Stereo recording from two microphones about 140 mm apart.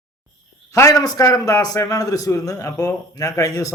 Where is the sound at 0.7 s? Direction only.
25° left (ahead or behind).